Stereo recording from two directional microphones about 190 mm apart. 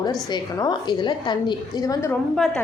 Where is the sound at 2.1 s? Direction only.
5° left (ahead or behind).